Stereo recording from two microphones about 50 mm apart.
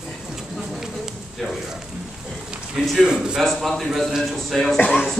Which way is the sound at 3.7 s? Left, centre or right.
Centre.